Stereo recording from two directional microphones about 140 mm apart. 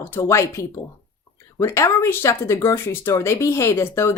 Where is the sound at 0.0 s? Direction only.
20° left (ahead or behind).